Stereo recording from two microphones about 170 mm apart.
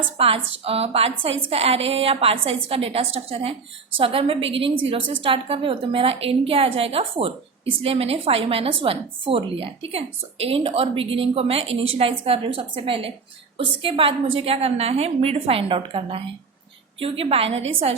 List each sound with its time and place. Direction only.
0.2 s a woman's voice: 35° right (ahead or behind)